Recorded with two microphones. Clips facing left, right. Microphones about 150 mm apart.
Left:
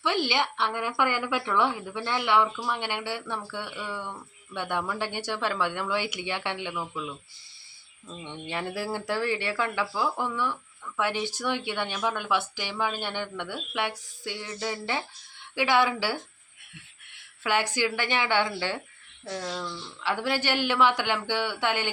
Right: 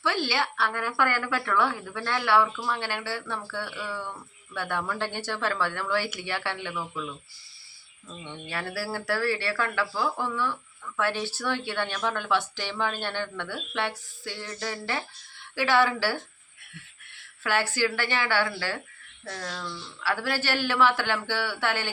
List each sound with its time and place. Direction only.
0.0 s a woman's voice: 15° left (ahead or behind)
8.1 s a woman's voice: 20° left (ahead or behind)
17.4 s a woman's voice: 15° left (ahead or behind)